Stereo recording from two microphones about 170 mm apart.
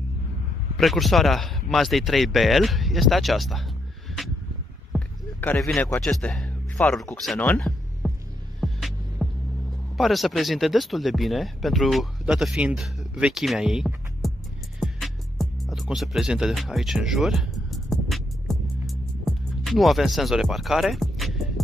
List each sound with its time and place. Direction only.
0.7 s speech: centre (ahead or behind)
4.9 s rowboat: 10° left (ahead or behind)
5.9 s speech: 5° left (ahead or behind)
8.6 s hum: centre (ahead or behind)
9.9 s speech: centre (ahead or behind)
14.8 s music: centre (ahead or behind)